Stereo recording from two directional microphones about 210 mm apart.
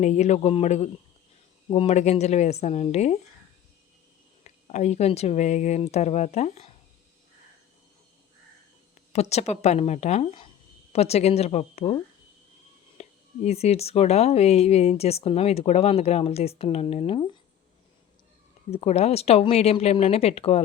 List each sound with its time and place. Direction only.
0.0 s speech: 35° left (ahead or behind)
4.4 s speech: 35° left (ahead or behind)
9.3 s speech: 30° left (ahead or behind)
13.0 s speech: 30° left (ahead or behind)
18.7 s speech: 30° left (ahead or behind)